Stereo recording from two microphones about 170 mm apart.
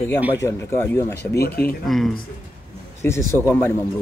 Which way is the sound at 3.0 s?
15° left (ahead or behind).